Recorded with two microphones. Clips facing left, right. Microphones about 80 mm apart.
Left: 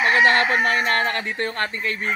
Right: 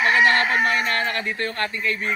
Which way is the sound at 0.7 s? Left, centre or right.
Left.